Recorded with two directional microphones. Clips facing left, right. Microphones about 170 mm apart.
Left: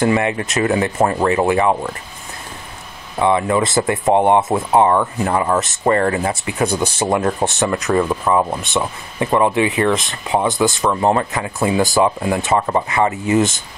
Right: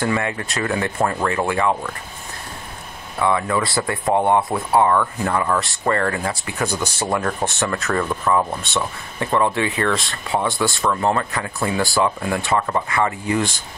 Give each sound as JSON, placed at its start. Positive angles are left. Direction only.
{"t": 0.0, "sound": "speech", "side_deg": 20}
{"t": 3.2, "sound": "speech", "side_deg": 25}